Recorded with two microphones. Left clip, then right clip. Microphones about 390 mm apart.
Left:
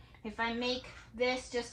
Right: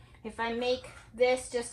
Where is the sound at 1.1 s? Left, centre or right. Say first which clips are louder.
Right 6 dB; centre.